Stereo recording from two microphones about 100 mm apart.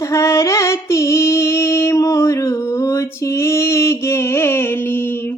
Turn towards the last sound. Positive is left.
turn(degrees=20)  # may be behind; listen again after turning